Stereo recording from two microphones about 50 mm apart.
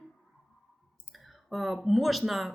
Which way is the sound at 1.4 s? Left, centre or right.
Centre.